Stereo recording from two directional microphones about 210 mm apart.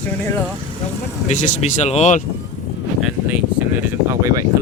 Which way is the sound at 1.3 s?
35° left (ahead or behind).